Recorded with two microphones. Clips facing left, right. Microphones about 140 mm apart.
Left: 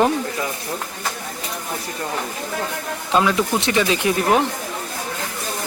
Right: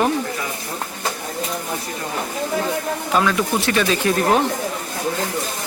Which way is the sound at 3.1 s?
20° left (ahead or behind).